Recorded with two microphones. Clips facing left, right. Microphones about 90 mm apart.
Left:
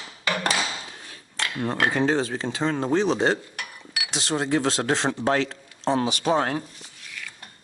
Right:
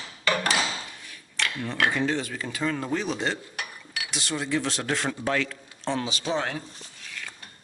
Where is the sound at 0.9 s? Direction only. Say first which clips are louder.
Left 2 dB; 35° left (ahead or behind).